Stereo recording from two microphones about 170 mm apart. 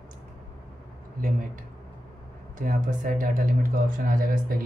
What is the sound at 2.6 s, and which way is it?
Speech, 50° right (ahead or behind).